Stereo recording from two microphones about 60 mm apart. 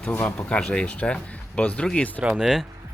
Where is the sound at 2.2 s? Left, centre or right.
Centre.